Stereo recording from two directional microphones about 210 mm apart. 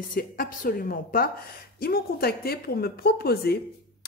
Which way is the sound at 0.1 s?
40° left (ahead or behind).